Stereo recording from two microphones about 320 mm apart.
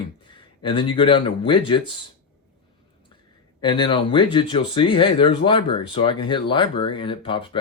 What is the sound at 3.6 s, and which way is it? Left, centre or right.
Speech, centre.